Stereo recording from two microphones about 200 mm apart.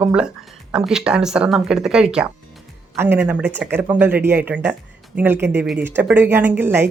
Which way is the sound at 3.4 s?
60° right (ahead or behind).